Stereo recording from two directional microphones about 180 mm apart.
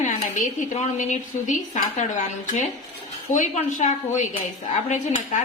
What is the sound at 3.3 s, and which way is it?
Speech, 45° left (ahead or behind).